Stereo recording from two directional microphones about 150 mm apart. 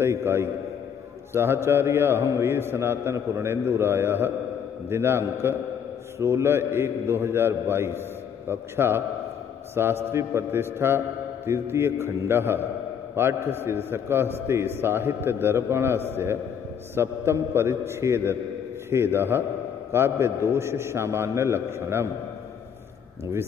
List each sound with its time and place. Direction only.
0.0 s a man's voice: 15° right (ahead or behind)